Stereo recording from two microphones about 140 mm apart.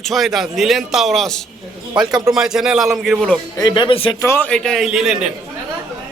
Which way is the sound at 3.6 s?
35° left (ahead or behind).